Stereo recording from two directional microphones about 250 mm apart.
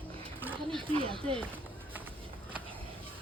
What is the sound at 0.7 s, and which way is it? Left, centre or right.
Speech, centre.